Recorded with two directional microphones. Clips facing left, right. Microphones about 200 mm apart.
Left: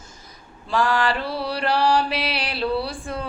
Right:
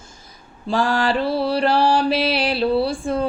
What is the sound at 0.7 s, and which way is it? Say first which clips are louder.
Mantra: right 2 dB; 30° right (ahead or behind).